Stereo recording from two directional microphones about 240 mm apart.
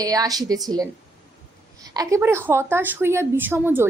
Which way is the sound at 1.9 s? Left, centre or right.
Centre.